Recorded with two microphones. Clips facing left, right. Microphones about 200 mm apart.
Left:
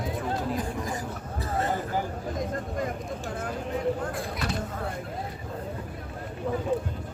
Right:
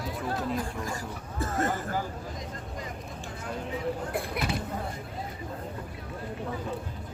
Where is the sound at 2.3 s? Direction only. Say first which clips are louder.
Left 8 dB; 50° left (ahead or behind).